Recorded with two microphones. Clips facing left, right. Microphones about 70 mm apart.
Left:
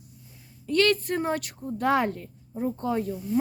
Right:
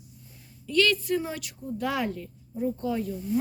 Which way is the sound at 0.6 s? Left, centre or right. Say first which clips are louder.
Left 2 dB; left.